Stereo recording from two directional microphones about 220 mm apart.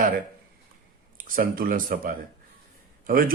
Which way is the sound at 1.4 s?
40° right (ahead or behind).